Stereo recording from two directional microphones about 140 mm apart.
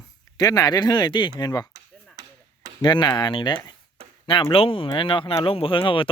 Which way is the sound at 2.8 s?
30° left (ahead or behind).